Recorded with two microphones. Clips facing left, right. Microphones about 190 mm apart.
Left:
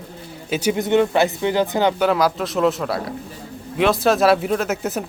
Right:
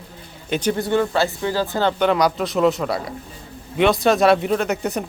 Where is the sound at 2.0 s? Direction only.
Centre (ahead or behind).